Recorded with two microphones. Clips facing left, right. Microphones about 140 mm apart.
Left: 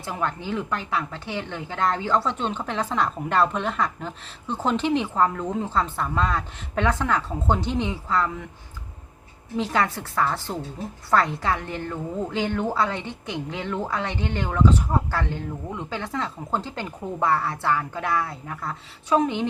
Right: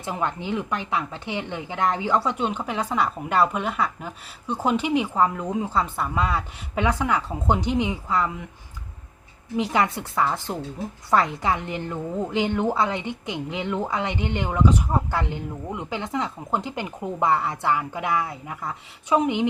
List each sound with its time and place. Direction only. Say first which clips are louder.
0.0 s speech: right 1 dB; 20° right (ahead or behind)
9.6 s speech: right 1 dB; 15° right (ahead or behind)